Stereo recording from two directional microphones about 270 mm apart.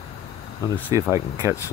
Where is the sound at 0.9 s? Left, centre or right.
Centre.